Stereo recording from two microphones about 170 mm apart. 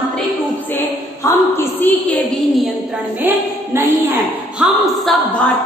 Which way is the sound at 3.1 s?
15° right (ahead or behind).